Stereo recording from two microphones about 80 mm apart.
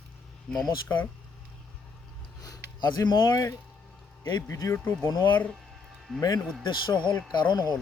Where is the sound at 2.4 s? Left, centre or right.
Left.